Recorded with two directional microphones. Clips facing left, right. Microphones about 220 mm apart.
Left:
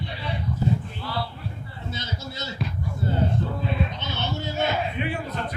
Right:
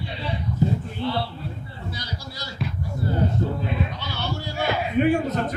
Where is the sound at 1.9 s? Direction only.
25° left (ahead or behind).